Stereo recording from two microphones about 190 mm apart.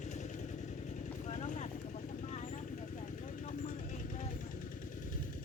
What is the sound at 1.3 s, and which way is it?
Vehicle, 35° left (ahead or behind).